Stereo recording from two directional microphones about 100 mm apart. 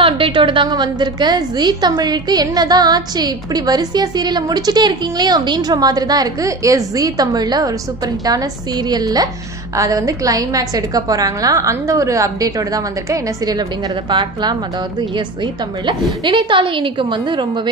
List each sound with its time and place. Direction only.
0.0 s a woman's voice: 60° right (ahead or behind); by 7.7 s 40° right (ahead or behind)
8.8 s a woman's voice: 40° right (ahead or behind)